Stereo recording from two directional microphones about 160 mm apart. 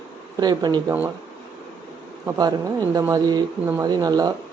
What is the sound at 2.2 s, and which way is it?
Speech, 25° right (ahead or behind).